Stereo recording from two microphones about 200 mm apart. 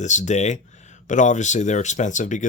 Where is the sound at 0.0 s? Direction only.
35° left (ahead or behind).